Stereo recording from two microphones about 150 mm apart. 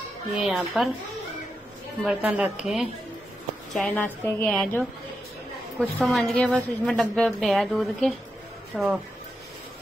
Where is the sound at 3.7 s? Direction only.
5° left (ahead or behind).